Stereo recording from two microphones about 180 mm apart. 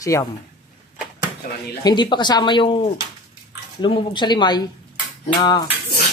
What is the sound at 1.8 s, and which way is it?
Speech, 25° left (ahead or behind).